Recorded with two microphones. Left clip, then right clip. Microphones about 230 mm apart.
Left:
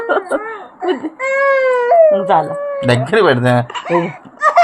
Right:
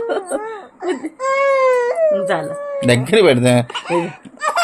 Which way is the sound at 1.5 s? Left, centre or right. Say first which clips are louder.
Left 4 dB; centre.